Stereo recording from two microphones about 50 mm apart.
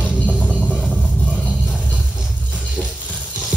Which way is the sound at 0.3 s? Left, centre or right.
Centre.